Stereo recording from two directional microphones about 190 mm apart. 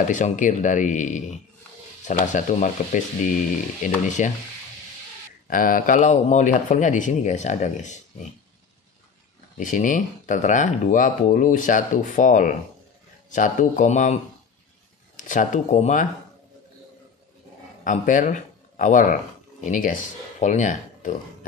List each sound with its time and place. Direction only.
0.1 s speech: 40° left (ahead or behind)
5.5 s speech: 45° left (ahead or behind)
9.6 s speech: 40° left (ahead or behind)
15.1 s speech: 40° left (ahead or behind)
17.8 s speech: 40° left (ahead or behind)